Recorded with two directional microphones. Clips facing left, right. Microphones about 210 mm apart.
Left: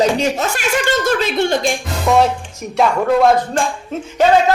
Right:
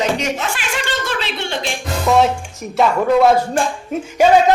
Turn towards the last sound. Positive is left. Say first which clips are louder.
# right 1 dB
turn(degrees=-10)  # may be behind; listen again after turning